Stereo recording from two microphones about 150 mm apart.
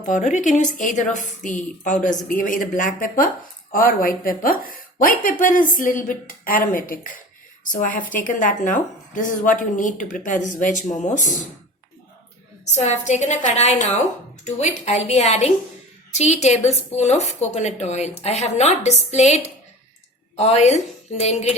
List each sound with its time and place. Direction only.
0.0 s a woman's voice: 55° left (ahead or behind)
12.7 s a woman's voice: 50° left (ahead or behind)